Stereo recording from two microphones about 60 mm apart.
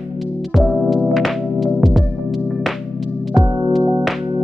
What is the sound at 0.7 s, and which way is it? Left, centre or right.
Music, centre.